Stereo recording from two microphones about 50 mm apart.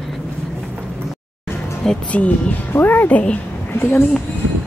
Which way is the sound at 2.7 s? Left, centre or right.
Left.